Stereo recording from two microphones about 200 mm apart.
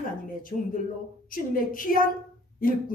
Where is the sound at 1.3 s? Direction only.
45° left (ahead or behind).